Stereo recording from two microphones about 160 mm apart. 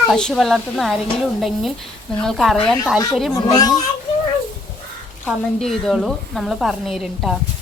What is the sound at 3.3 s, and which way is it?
Speech, 20° left (ahead or behind).